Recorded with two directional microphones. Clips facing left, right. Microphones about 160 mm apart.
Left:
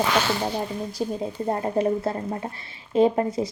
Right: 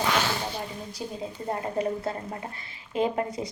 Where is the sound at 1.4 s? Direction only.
30° left (ahead or behind).